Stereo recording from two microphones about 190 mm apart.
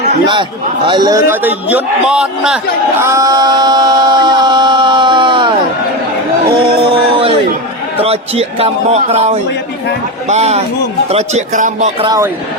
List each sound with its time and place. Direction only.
0.9 s a man's voice: 20° right (ahead or behind); by 2.6 s 5° right (ahead or behind)
3.0 s music: 15° right (ahead or behind)
8.0 s a man's voice: 30° right (ahead or behind)
12.0 s a man's voice: 20° right (ahead or behind)